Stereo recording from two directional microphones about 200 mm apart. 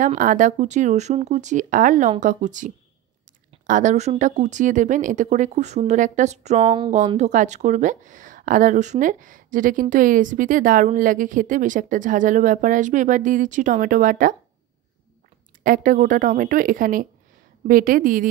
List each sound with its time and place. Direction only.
0.2 s speech: 40° right (ahead or behind)
15.6 s a woman's voice: 40° right (ahead or behind)